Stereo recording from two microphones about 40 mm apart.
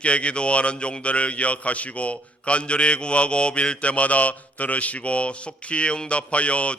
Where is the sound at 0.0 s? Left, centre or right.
Left.